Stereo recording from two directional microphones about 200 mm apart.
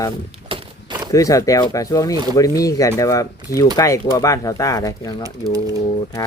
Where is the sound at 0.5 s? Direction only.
20° right (ahead or behind).